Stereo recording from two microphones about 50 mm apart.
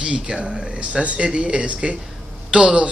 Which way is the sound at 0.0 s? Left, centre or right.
Right.